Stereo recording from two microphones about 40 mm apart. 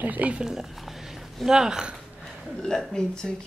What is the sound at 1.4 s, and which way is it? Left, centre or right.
Speech, centre.